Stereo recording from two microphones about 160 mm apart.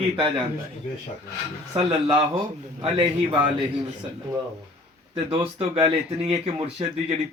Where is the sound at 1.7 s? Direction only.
35° right (ahead or behind).